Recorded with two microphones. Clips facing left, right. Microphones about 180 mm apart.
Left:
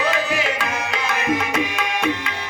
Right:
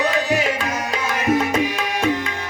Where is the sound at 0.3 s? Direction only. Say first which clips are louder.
Right 3 dB; 40° right (ahead or behind).